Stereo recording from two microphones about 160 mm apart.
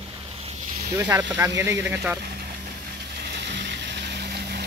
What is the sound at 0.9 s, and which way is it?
Speech, 20° right (ahead or behind).